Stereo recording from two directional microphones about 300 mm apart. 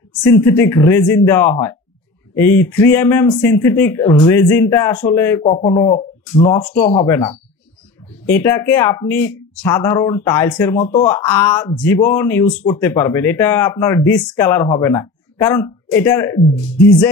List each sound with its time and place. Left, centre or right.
0.2 s speech: centre
6.6 s speech: centre